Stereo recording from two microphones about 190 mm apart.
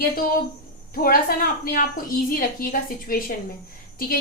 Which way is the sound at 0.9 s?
50° left (ahead or behind).